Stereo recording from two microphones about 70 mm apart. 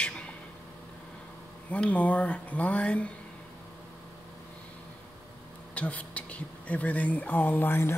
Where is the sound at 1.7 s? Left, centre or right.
Left.